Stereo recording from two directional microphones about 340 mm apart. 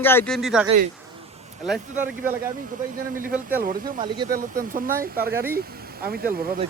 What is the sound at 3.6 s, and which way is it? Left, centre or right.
Speech, right.